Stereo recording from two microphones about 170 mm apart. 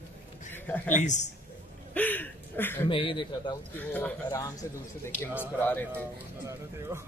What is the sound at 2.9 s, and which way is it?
Speech, 30° left (ahead or behind).